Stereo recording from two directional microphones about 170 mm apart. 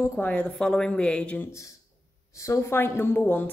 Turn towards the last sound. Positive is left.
turn(degrees=10)  # may be behind; listen again after turning